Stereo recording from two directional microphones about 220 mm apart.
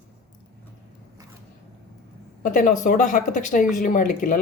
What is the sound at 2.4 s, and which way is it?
Speech, 35° left (ahead or behind).